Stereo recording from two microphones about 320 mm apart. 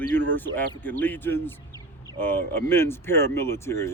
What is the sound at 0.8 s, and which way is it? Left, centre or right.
Speech, centre.